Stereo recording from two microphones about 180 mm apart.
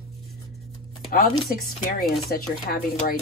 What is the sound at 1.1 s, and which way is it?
Speech, 55° left (ahead or behind).